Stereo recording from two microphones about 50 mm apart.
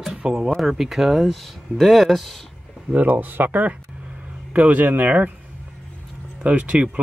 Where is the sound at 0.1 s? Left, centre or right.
Centre.